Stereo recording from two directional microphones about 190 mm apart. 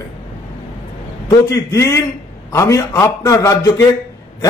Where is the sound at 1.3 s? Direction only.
15° left (ahead or behind).